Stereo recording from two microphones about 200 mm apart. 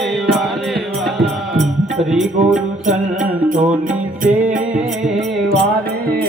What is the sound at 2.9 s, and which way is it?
Music, 40° right (ahead or behind).